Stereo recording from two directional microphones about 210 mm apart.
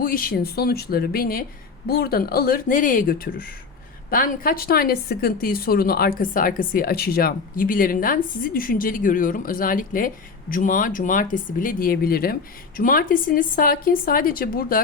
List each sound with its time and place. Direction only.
0.0 s a woman's voice: 45° left (ahead or behind)